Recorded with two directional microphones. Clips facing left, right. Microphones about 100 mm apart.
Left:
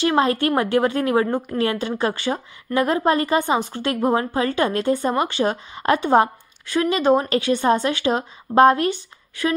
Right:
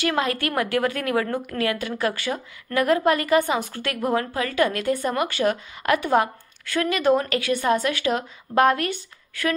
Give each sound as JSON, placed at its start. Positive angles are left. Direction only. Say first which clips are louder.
{"t": 0.0, "sound": "a woman's voice", "louder": "left 5 dB", "side_deg": 25}